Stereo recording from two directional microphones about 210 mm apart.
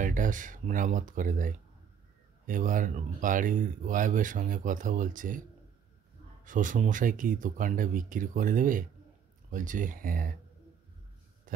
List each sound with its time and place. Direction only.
0.0 s speech: 40° right (ahead or behind)
6.4 s speech: 40° right (ahead or behind)